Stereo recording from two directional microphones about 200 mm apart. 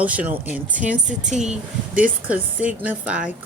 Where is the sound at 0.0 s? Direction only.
5° right (ahead or behind).